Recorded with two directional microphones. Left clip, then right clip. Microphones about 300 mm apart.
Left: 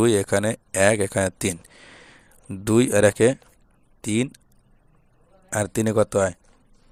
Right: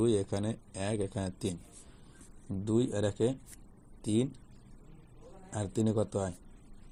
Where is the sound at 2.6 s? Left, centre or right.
Left.